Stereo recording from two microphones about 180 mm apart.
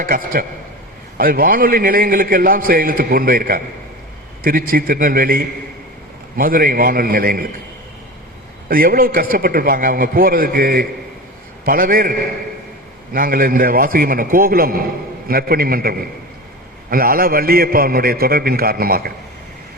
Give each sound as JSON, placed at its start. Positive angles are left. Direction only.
{"t": 0.0, "sound": "a man's voice", "side_deg": -50}
{"t": 8.7, "sound": "a man's voice", "side_deg": -55}
{"t": 13.1, "sound": "a man's voice", "side_deg": -50}